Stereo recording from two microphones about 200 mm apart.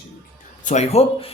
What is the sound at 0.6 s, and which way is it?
Speech, 35° left (ahead or behind).